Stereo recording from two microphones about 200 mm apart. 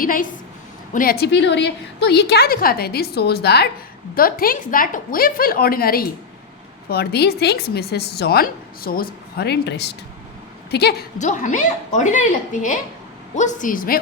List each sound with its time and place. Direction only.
0.0 s a woman's voice: 45° left (ahead or behind)
11.2 s a woman's voice: 40° left (ahead or behind)